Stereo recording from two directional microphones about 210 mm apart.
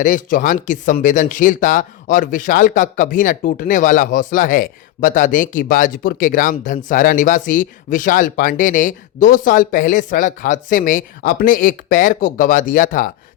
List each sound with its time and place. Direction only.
0.0 s speech: 40° left (ahead or behind)